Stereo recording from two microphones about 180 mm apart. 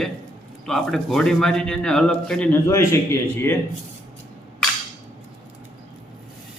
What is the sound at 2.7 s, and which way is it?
Speech, 15° left (ahead or behind).